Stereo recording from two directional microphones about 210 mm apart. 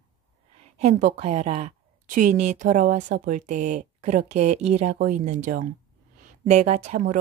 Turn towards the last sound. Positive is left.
turn(degrees=-35)  # may be behind; listen again after turning